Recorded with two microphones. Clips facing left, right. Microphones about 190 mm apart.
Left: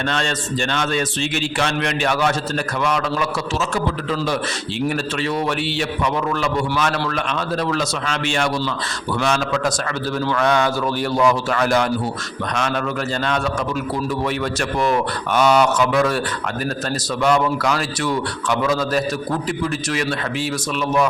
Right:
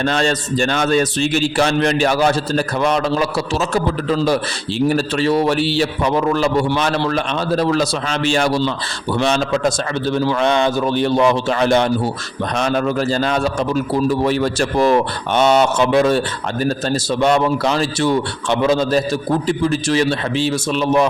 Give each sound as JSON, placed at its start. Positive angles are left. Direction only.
{"t": 0.0, "sound": "a man's voice", "side_deg": -35}
{"t": 4.9, "sound": "a man's voice", "side_deg": -35}